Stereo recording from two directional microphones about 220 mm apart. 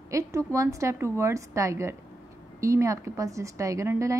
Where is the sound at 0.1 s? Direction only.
15° right (ahead or behind).